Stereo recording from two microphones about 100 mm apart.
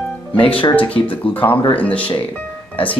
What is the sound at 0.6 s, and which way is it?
Speech, 60° left (ahead or behind).